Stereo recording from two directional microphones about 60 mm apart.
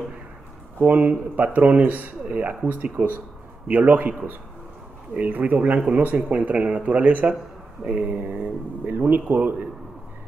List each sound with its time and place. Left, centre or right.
0.7 s speech: right